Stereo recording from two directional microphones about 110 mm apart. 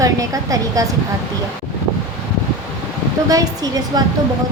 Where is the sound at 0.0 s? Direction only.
30° right (ahead or behind).